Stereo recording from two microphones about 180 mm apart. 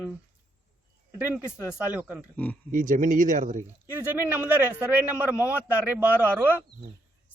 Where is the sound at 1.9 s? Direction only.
10° right (ahead or behind).